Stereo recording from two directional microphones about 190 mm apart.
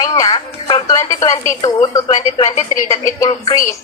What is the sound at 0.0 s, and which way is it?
Radio, 20° left (ahead or behind).